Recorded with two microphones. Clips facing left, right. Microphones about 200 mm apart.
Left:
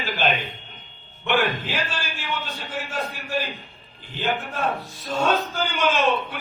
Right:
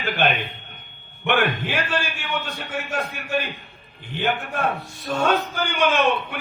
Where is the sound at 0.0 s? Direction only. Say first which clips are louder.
Right 2 dB; 60° right (ahead or behind).